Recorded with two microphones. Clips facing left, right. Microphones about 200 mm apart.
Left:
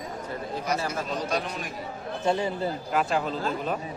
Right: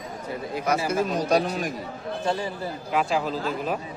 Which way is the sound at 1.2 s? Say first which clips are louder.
Right 7 dB; 40° right (ahead or behind).